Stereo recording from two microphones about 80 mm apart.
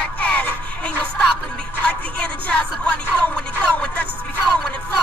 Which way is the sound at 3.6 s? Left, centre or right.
Centre.